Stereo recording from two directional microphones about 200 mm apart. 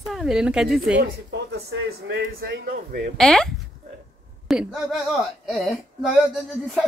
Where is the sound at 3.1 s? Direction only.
Centre (ahead or behind).